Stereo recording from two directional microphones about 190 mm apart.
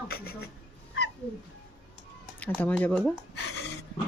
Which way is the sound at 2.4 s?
10° left (ahead or behind).